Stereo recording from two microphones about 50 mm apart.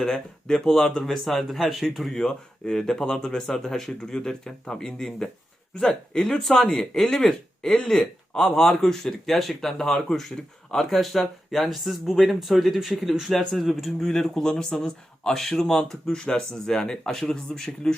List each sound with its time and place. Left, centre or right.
0.1 s speech: centre
14.3 s speech: centre